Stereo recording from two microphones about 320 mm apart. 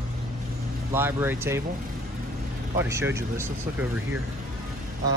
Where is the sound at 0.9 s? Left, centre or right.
Centre.